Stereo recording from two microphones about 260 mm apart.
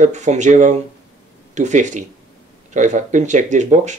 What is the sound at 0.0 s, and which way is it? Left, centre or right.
Speech, right.